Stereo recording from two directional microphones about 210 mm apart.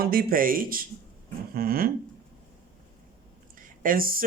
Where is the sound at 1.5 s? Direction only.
45° right (ahead or behind).